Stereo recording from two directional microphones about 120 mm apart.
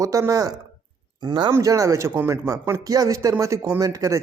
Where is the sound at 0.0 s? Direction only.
30° right (ahead or behind).